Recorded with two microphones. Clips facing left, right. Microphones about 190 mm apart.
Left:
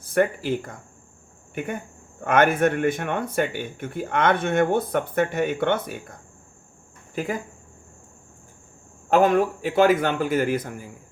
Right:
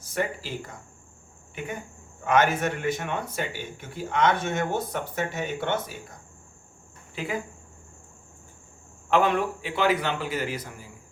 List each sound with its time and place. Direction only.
0.0 s a man's voice: 55° left (ahead or behind)
7.2 s a man's voice: 45° left (ahead or behind)
9.0 s a man's voice: 45° left (ahead or behind)